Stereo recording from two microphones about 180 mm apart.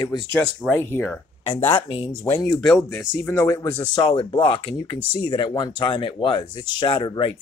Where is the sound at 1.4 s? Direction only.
30° left (ahead or behind).